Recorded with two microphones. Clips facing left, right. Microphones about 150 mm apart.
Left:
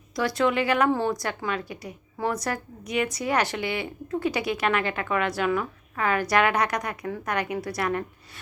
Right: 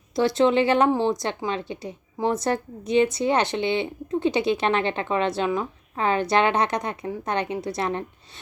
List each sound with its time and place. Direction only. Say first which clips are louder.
0.2 s speech: right 5 dB; 25° right (ahead or behind)